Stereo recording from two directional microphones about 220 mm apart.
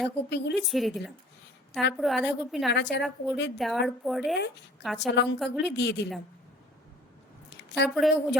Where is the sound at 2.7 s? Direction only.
50° left (ahead or behind).